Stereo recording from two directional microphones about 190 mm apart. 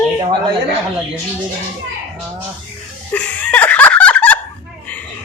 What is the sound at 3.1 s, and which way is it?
Laughter, 5° left (ahead or behind).